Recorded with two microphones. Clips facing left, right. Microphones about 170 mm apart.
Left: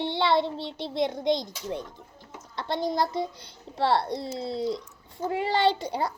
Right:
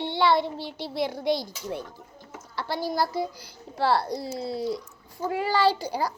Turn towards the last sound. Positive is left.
turn(degrees=25)  # may be behind; listen again after turning